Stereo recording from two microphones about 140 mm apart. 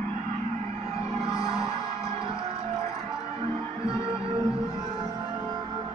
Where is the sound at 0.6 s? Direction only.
45° right (ahead or behind).